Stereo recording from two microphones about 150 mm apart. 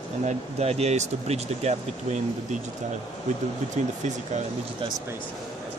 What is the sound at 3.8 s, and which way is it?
Speech, 50° right (ahead or behind).